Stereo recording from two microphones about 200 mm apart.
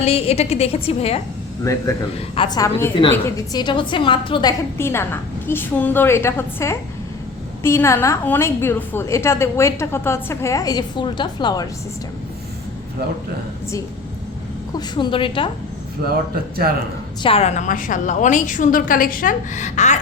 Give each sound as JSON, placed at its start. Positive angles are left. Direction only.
{"t": 0.0, "sound": "a woman's voice", "side_deg": 30}
{"t": 1.7, "sound": "a woman's voice", "side_deg": 15}
{"t": 2.3, "sound": "a woman's voice", "side_deg": 25}
{"t": 2.6, "sound": "a woman's voice", "side_deg": 10}
{"t": 4.8, "sound": "a woman's voice", "side_deg": 10}
{"t": 14.8, "sound": "a woman's voice", "side_deg": 20}
{"t": 16.3, "sound": "a man's voice", "side_deg": -50}
{"t": 17.2, "sound": "a woman's voice", "side_deg": 30}